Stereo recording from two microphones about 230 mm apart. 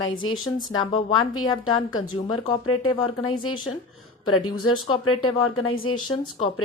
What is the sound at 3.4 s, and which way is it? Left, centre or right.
Speech, left.